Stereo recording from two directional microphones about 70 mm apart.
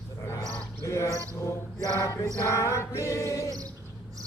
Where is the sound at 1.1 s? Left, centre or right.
Right.